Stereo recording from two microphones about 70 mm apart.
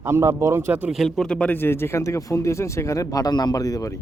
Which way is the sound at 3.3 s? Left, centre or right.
Left.